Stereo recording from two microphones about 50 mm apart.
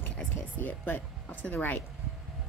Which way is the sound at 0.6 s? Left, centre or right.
Left.